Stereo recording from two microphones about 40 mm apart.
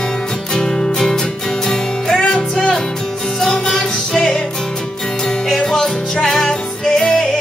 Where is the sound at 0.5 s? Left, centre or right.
Centre.